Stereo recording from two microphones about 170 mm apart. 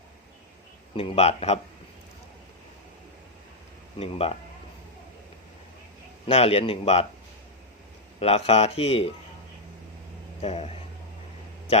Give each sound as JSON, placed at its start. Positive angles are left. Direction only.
{"t": 0.9, "sound": "a man's voice", "side_deg": 35}
{"t": 3.9, "sound": "a man's voice", "side_deg": 35}
{"t": 6.2, "sound": "a man's voice", "side_deg": 35}
{"t": 8.2, "sound": "a man's voice", "side_deg": 35}
{"t": 10.4, "sound": "a man's voice", "side_deg": 40}